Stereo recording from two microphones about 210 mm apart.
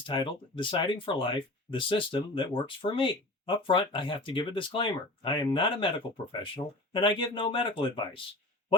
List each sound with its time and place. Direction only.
0.0 s speech: 25° left (ahead or behind)
6.9 s speech: 25° left (ahead or behind)